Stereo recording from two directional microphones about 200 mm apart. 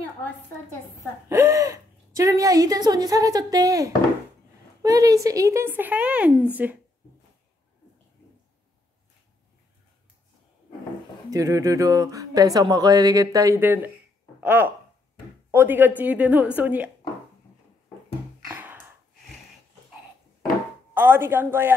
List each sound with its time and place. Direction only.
1.3 s speech: 15° right (ahead or behind)
11.2 s speech: 15° right (ahead or behind)
18.5 s a sound: 10° right (ahead or behind)
20.9 s speech: 10° right (ahead or behind)